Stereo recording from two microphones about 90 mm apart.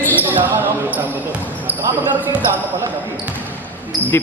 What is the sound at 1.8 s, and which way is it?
Speech, 25° right (ahead or behind).